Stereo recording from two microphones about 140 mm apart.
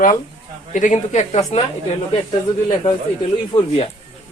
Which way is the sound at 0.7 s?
65° left (ahead or behind).